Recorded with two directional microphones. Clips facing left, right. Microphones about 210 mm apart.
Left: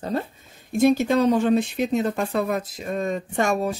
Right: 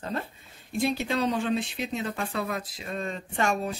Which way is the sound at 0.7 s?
45° left (ahead or behind).